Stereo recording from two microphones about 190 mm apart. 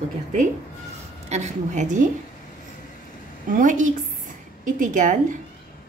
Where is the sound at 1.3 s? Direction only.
40° right (ahead or behind).